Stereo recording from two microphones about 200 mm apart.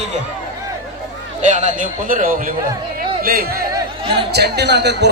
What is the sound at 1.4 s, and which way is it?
A man's voice, 35° right (ahead or behind).